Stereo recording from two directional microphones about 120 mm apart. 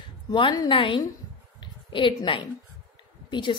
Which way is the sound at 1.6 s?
45° left (ahead or behind).